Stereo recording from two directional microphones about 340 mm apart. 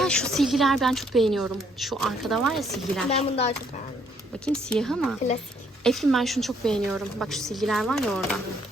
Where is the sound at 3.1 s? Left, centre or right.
Centre.